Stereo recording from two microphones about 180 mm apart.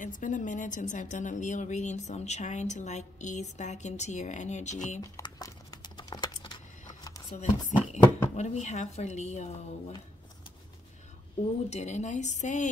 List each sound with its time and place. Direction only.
0.0 s a woman's voice: 45° left (ahead or behind)
5.1 s a sound: 20° left (ahead or behind)
7.3 s a woman's voice: 40° left (ahead or behind)
11.7 s a woman's voice: 40° left (ahead or behind)